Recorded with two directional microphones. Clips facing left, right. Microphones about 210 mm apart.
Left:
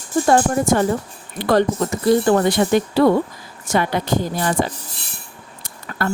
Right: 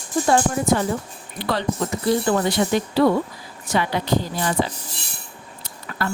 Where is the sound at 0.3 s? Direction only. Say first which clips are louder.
Left 3 dB; 50° left (ahead or behind).